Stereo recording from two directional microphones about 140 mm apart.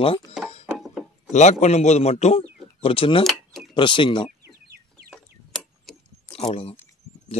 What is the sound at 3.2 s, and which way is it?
Cash register, centre (ahead or behind).